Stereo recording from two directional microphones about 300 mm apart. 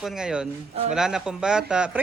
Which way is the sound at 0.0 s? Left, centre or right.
Centre.